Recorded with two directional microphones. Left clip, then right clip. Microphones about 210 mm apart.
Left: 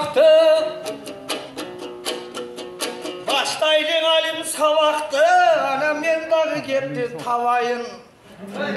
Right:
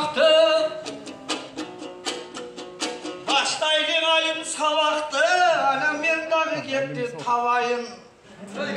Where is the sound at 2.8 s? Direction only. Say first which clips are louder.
Left 2 dB; 50° left (ahead or behind).